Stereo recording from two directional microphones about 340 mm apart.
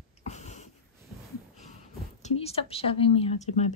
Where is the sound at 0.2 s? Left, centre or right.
Centre.